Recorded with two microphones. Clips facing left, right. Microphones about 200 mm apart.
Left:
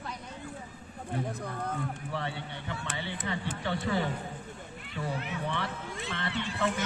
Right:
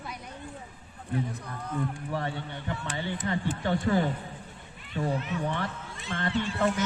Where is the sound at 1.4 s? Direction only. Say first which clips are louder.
Left 2 dB; 55° left (ahead or behind).